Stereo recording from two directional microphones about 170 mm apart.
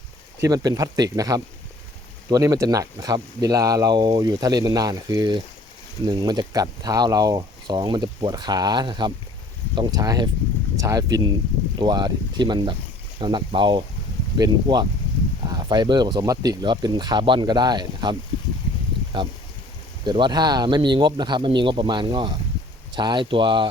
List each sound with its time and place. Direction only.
0.4 s speech: 20° right (ahead or behind)